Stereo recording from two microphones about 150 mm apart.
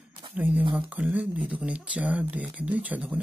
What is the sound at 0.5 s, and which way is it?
Speech, 35° right (ahead or behind).